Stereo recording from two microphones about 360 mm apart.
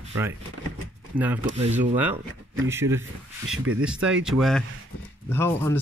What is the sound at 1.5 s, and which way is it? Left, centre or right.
Speech, centre.